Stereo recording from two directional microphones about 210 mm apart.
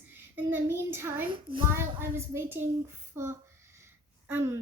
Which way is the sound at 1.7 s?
10° right (ahead or behind).